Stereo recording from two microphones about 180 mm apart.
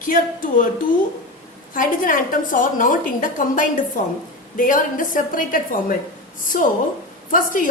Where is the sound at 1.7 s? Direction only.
50° left (ahead or behind).